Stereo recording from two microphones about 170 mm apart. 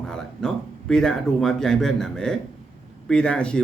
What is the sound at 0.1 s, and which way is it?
A man's voice, 5° left (ahead or behind).